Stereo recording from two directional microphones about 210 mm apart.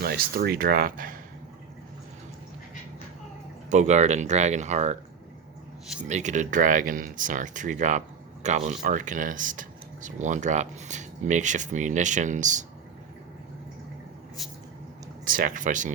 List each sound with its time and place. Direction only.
0.0 s speech: 45° right (ahead or behind)
3.7 s speech: 35° right (ahead or behind)
6.1 s speech: 35° right (ahead or behind)
15.2 s speech: 40° right (ahead or behind)